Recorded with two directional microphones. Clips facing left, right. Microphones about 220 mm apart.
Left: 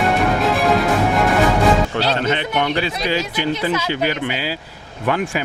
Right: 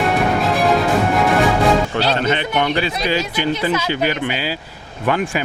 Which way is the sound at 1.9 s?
15° right (ahead or behind).